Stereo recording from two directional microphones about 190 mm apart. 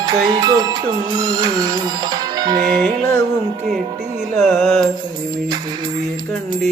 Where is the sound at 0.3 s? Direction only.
20° right (ahead or behind).